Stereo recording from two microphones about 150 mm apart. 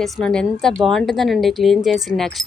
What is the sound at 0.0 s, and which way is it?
Speech, 5° left (ahead or behind).